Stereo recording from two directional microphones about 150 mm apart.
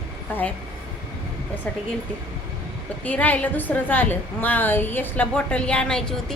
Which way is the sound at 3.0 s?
10° left (ahead or behind).